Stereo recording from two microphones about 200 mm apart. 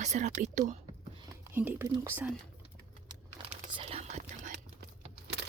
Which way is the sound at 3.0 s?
25° right (ahead or behind).